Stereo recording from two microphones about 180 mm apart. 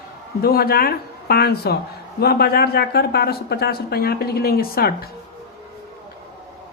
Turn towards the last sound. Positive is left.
turn(degrees=60)  # may be behind; listen again after turning